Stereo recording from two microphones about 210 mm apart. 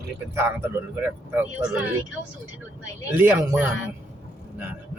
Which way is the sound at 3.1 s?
10° right (ahead or behind).